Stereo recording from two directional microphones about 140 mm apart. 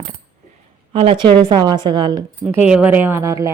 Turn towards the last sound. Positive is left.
turn(degrees=-20)  # may be behind; listen again after turning